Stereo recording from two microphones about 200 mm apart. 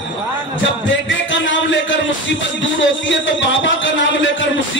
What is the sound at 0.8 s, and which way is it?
Music, 65° left (ahead or behind).